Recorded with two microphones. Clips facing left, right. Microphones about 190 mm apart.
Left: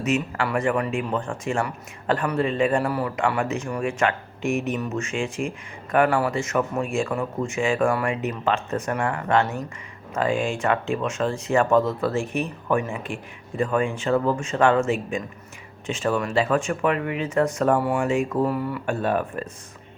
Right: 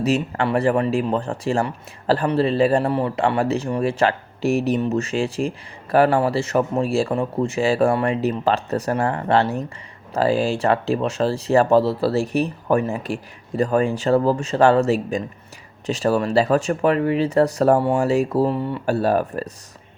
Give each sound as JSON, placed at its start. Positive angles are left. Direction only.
{"t": 0.0, "sound": "speech", "side_deg": -35}